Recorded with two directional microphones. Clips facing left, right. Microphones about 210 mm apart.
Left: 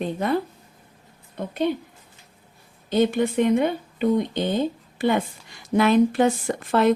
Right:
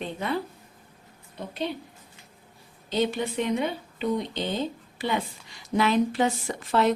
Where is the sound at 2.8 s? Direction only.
50° left (ahead or behind).